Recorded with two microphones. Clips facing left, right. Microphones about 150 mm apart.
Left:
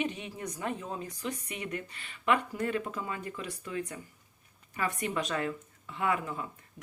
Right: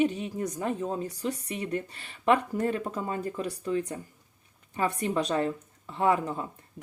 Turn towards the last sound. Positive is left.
turn(degrees=-35)  # may be behind; listen again after turning